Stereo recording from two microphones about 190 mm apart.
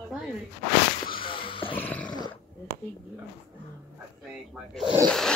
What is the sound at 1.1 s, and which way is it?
Music, 25° left (ahead or behind).